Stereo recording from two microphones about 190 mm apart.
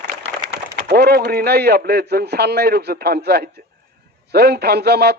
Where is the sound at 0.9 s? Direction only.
55° right (ahead or behind).